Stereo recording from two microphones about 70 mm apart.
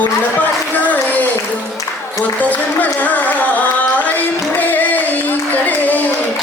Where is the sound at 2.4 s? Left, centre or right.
Left.